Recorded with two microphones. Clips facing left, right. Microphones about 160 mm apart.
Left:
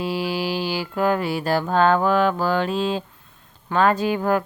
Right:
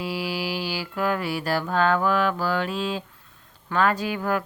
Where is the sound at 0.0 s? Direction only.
25° left (ahead or behind).